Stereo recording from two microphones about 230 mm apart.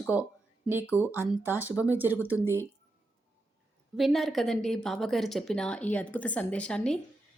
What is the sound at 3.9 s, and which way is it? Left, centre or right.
A woman's voice, centre.